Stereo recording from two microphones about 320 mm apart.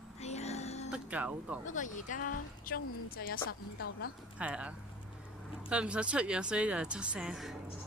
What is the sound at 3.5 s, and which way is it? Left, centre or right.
Speech, left.